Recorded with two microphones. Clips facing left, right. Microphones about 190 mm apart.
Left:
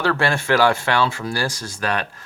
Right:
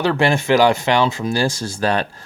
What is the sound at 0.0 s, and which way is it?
Speech, 20° right (ahead or behind).